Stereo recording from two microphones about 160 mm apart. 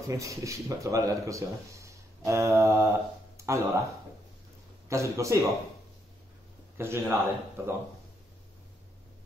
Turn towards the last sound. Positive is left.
turn(degrees=-15)  # may be behind; listen again after turning